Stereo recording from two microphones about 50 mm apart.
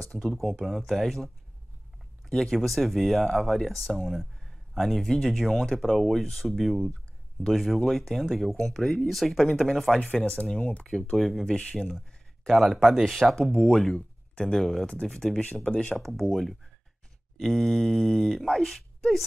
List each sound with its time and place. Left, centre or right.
0.2 s speech: centre
0.8 s speech: centre
8.5 s speech: centre
9.0 s speech: centre
9.9 s speech: centre
10.6 s speech: left
11.1 s speech: centre
14.9 s speech: centre
16.0 s speech: centre